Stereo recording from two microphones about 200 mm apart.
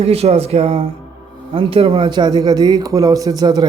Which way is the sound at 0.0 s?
30° right (ahead or behind).